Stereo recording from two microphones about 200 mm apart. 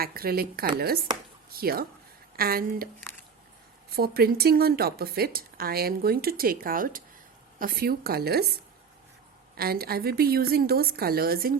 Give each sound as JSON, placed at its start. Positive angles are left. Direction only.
{"t": 0.0, "sound": "speech", "side_deg": -50}
{"t": 3.9, "sound": "speech", "side_deg": -50}
{"t": 9.6, "sound": "speech", "side_deg": -50}